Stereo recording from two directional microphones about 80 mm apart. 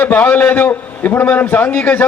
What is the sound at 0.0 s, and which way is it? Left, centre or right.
A man's voice, left.